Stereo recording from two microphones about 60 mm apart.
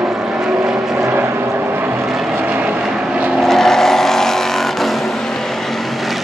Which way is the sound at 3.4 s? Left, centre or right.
Centre.